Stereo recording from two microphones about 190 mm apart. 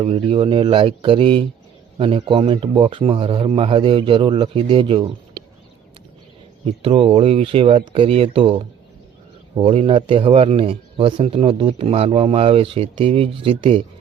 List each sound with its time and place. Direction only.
0.0 s speech: 30° right (ahead or behind)
6.8 s speech: 30° right (ahead or behind)